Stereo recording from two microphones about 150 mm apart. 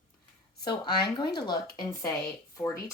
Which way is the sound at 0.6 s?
30° left (ahead or behind).